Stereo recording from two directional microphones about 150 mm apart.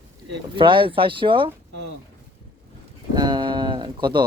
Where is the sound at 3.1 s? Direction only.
25° right (ahead or behind).